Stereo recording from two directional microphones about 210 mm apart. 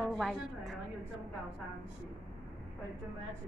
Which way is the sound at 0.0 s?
Centre (ahead or behind).